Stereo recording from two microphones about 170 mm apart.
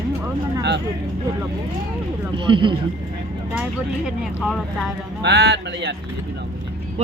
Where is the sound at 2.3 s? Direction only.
30° right (ahead or behind).